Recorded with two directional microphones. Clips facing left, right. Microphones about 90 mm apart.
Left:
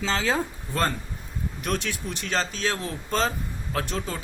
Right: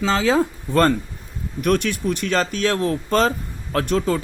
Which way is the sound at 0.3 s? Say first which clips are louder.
Right 9 dB; 60° right (ahead or behind).